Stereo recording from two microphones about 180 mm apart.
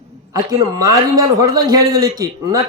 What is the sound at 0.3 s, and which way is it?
A man's voice, 20° right (ahead or behind).